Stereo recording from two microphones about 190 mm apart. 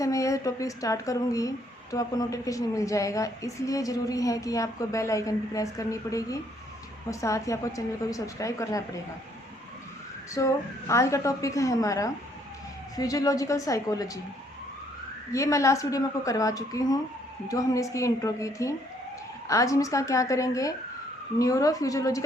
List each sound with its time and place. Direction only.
0.0 s a woman's voice: 15° left (ahead or behind)
10.3 s a woman's voice: 15° left (ahead or behind)
15.3 s a woman's voice: 15° left (ahead or behind)